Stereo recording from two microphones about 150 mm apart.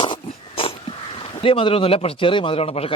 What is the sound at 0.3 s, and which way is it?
Speech, 40° left (ahead or behind).